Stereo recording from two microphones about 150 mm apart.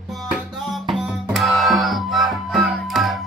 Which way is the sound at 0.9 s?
Centre (ahead or behind).